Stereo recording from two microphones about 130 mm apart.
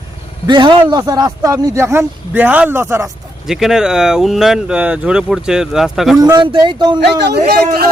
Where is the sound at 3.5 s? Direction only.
5° right (ahead or behind).